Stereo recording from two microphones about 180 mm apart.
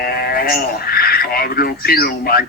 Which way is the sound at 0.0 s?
60° left (ahead or behind).